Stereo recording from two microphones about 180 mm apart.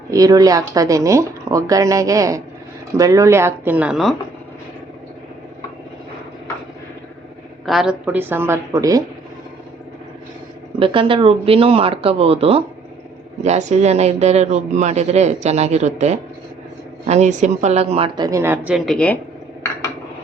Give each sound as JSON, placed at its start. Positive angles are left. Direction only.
{"t": 0.1, "sound": "a woman's voice", "side_deg": -20}
{"t": 7.6, "sound": "a woman's voice", "side_deg": 0}
{"t": 10.8, "sound": "a man's voice", "side_deg": -30}
{"t": 18.3, "sound": "a woman's voice", "side_deg": -15}